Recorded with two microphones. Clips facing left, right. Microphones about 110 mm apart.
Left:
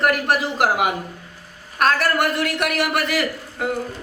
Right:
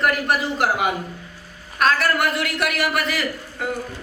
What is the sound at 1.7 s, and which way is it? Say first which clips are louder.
A man's voice: left 1 dB; 50° left (ahead or behind).